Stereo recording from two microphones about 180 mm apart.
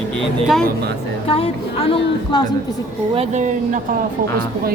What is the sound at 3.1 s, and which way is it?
Speech, 40° right (ahead or behind).